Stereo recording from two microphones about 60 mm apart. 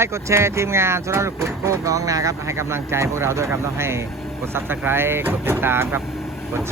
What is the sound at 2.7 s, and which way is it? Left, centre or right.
Speech, right.